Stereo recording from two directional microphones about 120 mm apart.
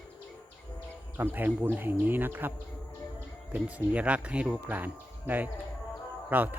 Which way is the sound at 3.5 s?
10° right (ahead or behind).